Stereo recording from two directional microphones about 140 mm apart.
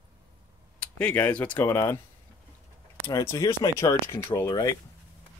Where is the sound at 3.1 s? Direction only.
25° left (ahead or behind).